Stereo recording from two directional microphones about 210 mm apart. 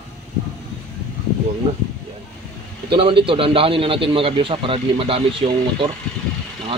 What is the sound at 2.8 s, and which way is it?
A man's voice, 25° right (ahead or behind).